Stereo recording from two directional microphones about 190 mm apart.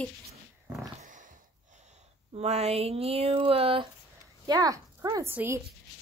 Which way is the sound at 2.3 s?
35° right (ahead or behind).